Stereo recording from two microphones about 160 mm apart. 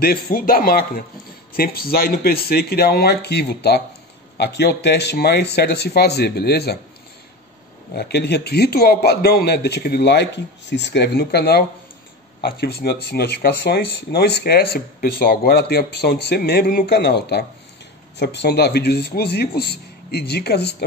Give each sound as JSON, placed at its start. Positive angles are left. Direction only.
{"t": 0.0, "sound": "a man's voice", "side_deg": 65}
{"t": 7.9, "sound": "a man's voice", "side_deg": 90}
{"t": 12.4, "sound": "a man's voice", "side_deg": 80}